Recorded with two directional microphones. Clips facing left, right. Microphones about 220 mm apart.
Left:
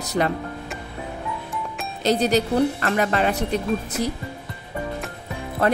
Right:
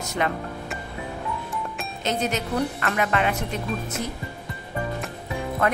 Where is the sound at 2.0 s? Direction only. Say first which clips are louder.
Left 7 dB; 35° left (ahead or behind).